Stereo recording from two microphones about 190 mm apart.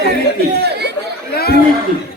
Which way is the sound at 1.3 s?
55° left (ahead or behind).